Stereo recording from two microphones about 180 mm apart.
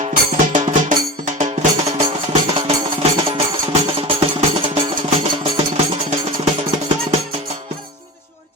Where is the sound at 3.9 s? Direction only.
30° right (ahead or behind).